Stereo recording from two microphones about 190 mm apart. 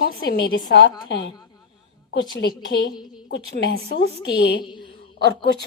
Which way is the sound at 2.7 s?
60° left (ahead or behind).